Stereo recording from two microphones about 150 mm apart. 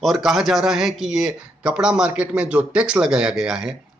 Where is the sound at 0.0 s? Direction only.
Centre (ahead or behind).